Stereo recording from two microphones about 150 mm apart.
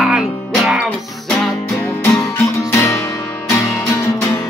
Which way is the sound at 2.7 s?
20° left (ahead or behind).